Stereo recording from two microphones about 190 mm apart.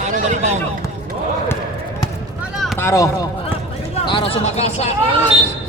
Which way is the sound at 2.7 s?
15° left (ahead or behind).